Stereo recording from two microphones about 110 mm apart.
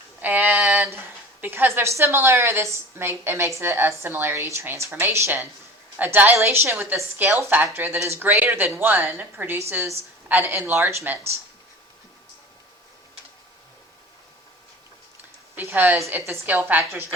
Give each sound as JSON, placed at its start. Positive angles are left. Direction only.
{"t": 0.2, "sound": "a woman's voice", "side_deg": -15}
{"t": 15.5, "sound": "a woman's voice", "side_deg": -15}